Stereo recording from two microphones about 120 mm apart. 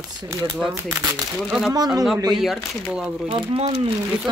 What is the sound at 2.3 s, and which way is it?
Speech, centre (ahead or behind).